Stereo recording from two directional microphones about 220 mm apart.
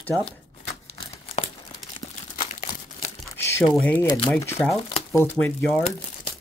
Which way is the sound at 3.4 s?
10° left (ahead or behind).